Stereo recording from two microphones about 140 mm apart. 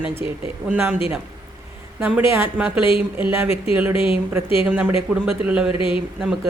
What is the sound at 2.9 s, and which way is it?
Speech, 40° left (ahead or behind).